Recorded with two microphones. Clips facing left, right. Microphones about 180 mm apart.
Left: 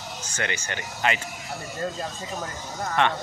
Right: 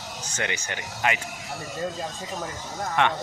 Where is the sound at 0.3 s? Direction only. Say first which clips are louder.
Even; 15° right (ahead or behind).